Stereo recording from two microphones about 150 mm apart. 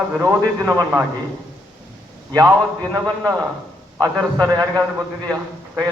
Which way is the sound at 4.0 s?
25° right (ahead or behind).